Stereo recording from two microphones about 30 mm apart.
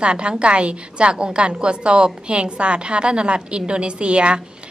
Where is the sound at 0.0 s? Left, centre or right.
Right.